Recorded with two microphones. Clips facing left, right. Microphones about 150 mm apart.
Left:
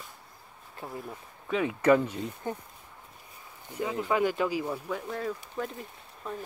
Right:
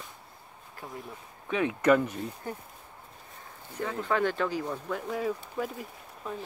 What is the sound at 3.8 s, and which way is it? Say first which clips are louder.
Speech: left 1 dB; 10° left (ahead or behind).